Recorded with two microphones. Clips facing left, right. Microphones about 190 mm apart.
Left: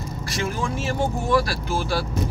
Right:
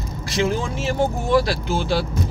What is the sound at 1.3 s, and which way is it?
Speech, 25° right (ahead or behind).